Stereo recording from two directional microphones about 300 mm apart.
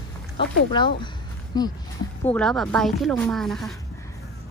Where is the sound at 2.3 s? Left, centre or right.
Centre.